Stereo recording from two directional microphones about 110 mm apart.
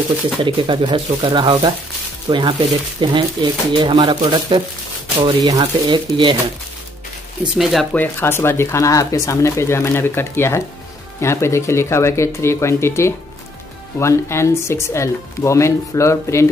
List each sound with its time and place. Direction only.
0.6 s speech: 45° right (ahead or behind)
5.4 s speech: 35° right (ahead or behind)
7.5 s speech: centre (ahead or behind)
7.9 s speech: 20° left (ahead or behind)